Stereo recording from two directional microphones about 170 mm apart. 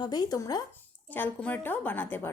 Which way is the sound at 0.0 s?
25° left (ahead or behind).